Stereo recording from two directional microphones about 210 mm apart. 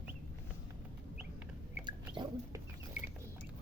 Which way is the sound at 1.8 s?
20° right (ahead or behind).